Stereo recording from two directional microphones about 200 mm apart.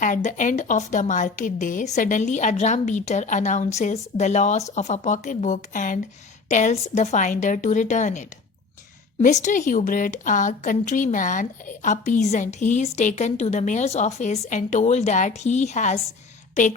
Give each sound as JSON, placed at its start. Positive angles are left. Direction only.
{"t": 0.0, "sound": "a woman's voice", "side_deg": 40}